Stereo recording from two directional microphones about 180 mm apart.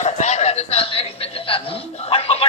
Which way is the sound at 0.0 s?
40° left (ahead or behind).